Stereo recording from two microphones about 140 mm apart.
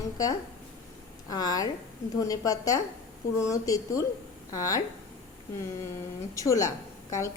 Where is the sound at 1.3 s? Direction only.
25° left (ahead or behind).